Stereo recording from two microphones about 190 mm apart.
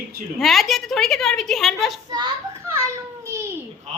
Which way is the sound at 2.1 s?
25° right (ahead or behind).